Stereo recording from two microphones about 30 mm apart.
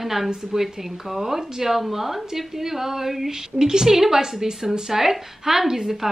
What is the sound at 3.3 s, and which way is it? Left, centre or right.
Speech, right.